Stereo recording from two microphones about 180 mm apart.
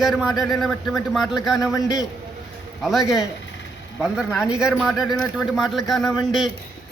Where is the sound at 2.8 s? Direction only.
Centre (ahead or behind).